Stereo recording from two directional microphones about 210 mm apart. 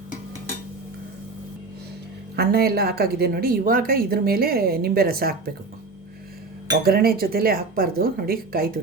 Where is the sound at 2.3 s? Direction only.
45° right (ahead or behind).